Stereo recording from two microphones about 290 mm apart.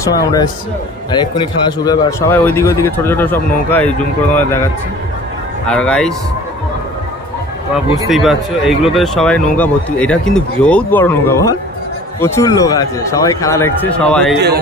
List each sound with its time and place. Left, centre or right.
0.0 s a man's voice: centre
5.7 s speech: centre
8.1 s a man's voice: centre